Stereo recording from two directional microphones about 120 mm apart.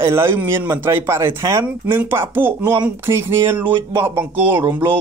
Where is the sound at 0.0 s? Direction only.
20° right (ahead or behind).